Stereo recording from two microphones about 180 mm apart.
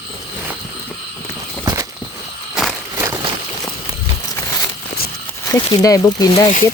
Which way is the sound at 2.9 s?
15° right (ahead or behind).